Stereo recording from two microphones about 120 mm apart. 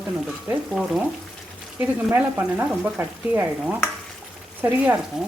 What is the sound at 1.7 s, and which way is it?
Speech, 15° right (ahead or behind).